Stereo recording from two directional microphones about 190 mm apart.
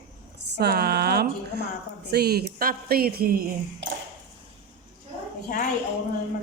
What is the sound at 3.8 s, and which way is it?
Ping, 70° right (ahead or behind).